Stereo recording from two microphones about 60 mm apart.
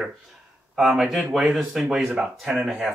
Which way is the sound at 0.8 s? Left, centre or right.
Centre.